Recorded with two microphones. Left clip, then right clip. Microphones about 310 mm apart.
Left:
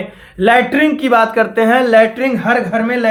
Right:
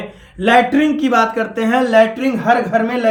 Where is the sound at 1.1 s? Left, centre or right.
Centre.